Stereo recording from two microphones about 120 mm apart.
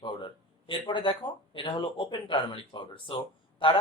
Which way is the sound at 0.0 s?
40° left (ahead or behind).